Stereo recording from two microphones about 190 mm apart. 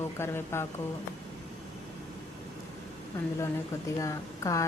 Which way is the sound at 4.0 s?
15° left (ahead or behind).